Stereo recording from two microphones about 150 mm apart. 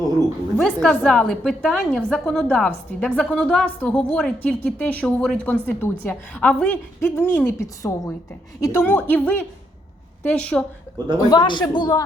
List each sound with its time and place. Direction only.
0.6 s a woman's voice: 5° left (ahead or behind)
11.3 s speech: 30° left (ahead or behind)